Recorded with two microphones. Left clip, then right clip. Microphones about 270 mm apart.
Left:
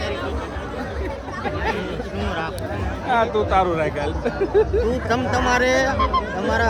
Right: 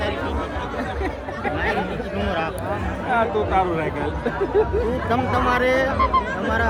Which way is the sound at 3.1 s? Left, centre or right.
Left.